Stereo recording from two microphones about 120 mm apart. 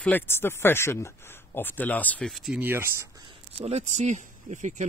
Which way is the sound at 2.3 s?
Centre (ahead or behind).